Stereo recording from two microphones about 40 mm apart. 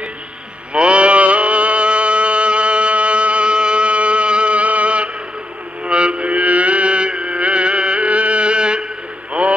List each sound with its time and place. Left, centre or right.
0.7 s music: right
9.4 s mantra: right